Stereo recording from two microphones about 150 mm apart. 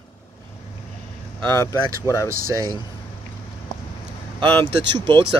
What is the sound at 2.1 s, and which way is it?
Speech, 25° left (ahead or behind).